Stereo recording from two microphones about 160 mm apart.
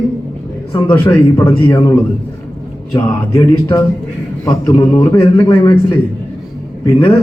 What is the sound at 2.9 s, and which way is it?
Speech, 20° left (ahead or behind).